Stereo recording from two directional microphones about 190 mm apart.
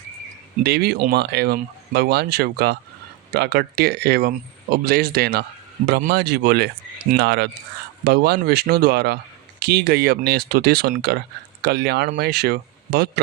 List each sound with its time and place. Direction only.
0.6 s speech: 55° right (ahead or behind)